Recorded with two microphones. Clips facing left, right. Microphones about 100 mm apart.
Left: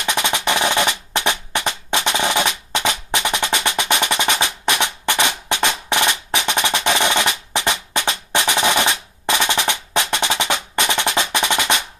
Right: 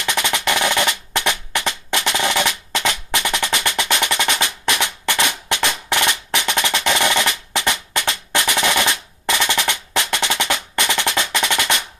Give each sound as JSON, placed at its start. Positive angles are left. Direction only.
{"t": 0.0, "sound": "percussion", "side_deg": 20}
{"t": 3.4, "sound": "music", "side_deg": 20}
{"t": 4.2, "sound": "percussion", "side_deg": 20}